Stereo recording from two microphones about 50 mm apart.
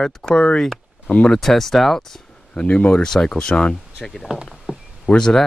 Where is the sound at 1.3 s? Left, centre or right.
Centre.